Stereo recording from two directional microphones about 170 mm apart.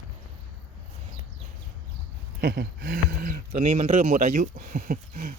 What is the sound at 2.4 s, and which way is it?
Speech, 75° right (ahead or behind).